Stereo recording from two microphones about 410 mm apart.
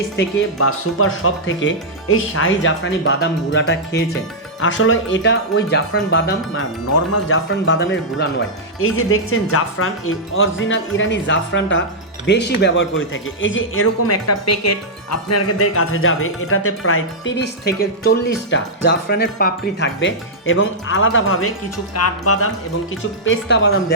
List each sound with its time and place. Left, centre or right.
0.2 s speech: left